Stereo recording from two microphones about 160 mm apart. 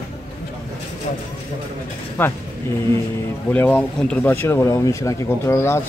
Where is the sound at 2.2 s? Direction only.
10° left (ahead or behind).